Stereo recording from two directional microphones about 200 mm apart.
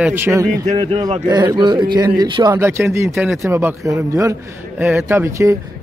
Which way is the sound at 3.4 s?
10° right (ahead or behind).